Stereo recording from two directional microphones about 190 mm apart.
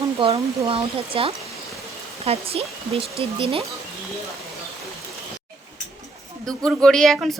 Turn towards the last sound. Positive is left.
turn(degrees=0)  # may be behind; listen again after turning